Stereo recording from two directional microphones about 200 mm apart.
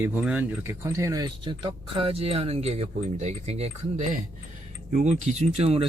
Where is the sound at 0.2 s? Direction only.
10° right (ahead or behind).